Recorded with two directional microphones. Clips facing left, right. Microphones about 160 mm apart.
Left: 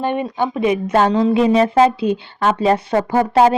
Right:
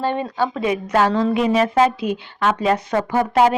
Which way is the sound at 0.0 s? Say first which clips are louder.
Left 2 dB; 20° left (ahead or behind).